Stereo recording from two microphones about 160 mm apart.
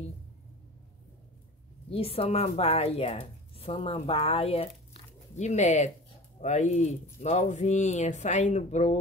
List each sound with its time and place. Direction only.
1.9 s speech: 35° left (ahead or behind)